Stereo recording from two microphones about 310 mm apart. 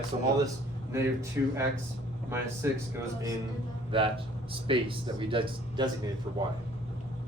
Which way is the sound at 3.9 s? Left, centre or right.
Centre.